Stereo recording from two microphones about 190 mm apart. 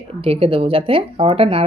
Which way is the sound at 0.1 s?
30° right (ahead or behind).